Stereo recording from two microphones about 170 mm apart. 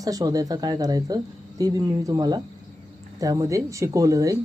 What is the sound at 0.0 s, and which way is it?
Speech, 20° right (ahead or behind).